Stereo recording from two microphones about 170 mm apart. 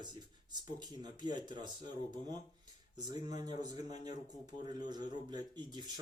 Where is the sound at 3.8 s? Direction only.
40° left (ahead or behind).